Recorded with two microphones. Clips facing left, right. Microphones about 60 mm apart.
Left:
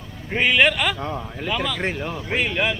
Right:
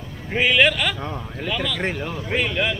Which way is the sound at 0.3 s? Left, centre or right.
Centre.